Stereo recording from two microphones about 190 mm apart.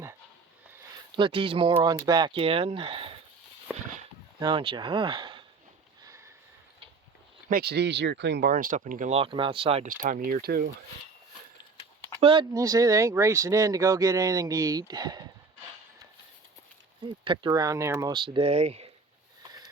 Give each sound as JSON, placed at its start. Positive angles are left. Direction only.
{"t": 1.1, "sound": "speech", "side_deg": -25}
{"t": 4.4, "sound": "speech", "side_deg": -25}
{"t": 7.5, "sound": "speech", "side_deg": -60}
{"t": 9.1, "sound": "speech", "side_deg": -25}
{"t": 12.2, "sound": "speech", "side_deg": -25}
{"t": 17.2, "sound": "speech", "side_deg": -20}
{"t": 19.4, "sound": "a sound", "side_deg": -20}